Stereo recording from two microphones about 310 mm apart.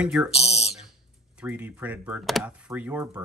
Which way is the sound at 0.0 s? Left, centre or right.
Centre.